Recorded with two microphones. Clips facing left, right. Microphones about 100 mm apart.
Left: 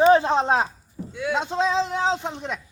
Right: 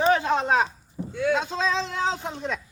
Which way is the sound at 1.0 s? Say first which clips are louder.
Right 2 dB; 15° right (ahead or behind).